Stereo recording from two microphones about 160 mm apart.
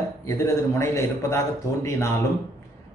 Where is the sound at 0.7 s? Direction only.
20° left (ahead or behind).